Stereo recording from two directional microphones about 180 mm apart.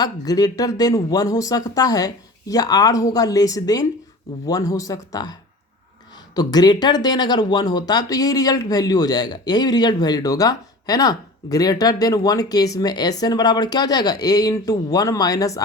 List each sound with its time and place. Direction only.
0.0 s speech: 20° left (ahead or behind)